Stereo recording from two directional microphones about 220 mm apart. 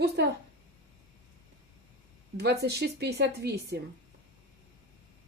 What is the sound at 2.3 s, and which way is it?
Speech, 50° right (ahead or behind).